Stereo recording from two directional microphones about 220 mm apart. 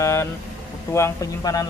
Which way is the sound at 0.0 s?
10° left (ahead or behind).